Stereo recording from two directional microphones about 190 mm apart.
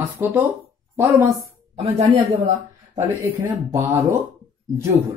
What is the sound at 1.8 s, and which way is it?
Speech, 30° right (ahead or behind).